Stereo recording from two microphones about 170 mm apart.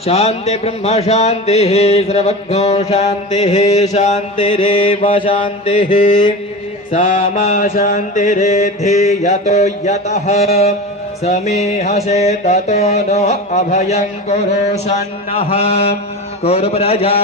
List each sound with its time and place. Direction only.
0.0 s music: 35° left (ahead or behind)
3.9 s mantra: 45° left (ahead or behind)
4.5 s music: 30° left (ahead or behind)
5.8 s mantra: 50° left (ahead or behind)
11.2 s music: 40° left (ahead or behind)